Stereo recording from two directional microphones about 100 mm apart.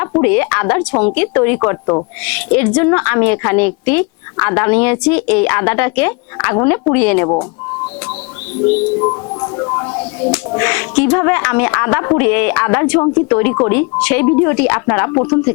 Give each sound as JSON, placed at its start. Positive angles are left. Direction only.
{"t": 0.0, "sound": "speech", "side_deg": 20}
{"t": 10.5, "sound": "speech", "side_deg": 20}